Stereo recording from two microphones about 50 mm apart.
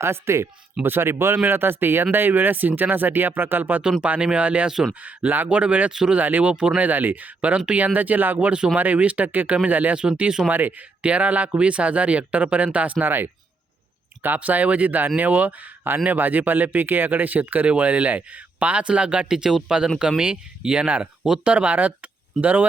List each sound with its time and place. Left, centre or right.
0.0 s speech: right
4.0 s speech: right
5.9 s speech: centre
6.1 s speech: right
10.0 s speech: centre
10.5 s speech: right
13.1 s speech: right
14.3 s speech: right